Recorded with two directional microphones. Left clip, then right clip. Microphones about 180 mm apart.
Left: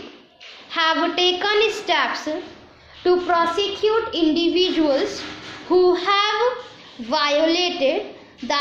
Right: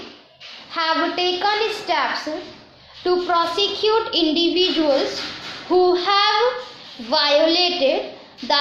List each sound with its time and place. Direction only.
0.7 s a child's voice: 30° left (ahead or behind)